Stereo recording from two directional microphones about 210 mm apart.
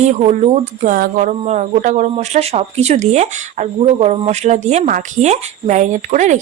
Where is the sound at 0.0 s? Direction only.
35° right (ahead or behind).